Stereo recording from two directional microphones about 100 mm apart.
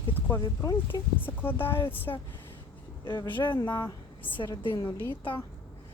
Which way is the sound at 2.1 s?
40° left (ahead or behind).